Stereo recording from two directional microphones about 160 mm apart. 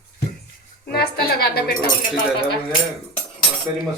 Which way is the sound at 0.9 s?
85° left.